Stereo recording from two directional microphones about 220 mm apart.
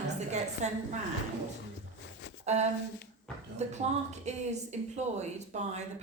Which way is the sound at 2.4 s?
30° right (ahead or behind).